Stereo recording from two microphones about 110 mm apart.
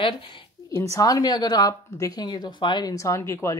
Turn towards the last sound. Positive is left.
turn(degrees=25)  # may be behind; listen again after turning